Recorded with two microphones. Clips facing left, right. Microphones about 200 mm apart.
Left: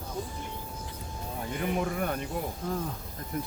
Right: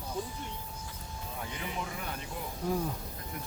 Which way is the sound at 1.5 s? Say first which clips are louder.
Left 11 dB; 55° left (ahead or behind).